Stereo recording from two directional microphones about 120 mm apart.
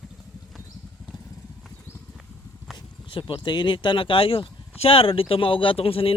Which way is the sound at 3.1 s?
40° left (ahead or behind).